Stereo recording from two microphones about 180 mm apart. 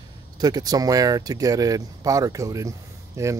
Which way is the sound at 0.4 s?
20° right (ahead or behind).